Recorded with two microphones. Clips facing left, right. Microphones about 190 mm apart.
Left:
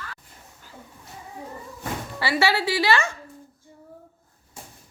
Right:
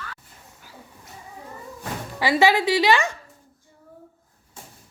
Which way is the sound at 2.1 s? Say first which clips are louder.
Right 4 dB; 15° right (ahead or behind).